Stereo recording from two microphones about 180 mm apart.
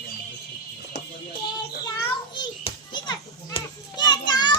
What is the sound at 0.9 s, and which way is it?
Music, 65° left (ahead or behind).